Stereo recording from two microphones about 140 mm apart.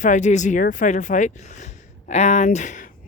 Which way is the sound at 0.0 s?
60° left (ahead or behind).